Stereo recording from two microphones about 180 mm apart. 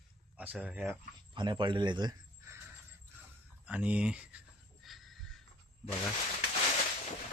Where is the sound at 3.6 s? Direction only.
10° right (ahead or behind).